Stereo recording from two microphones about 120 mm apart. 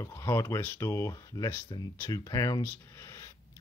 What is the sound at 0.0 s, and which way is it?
Speech, 25° left (ahead or behind).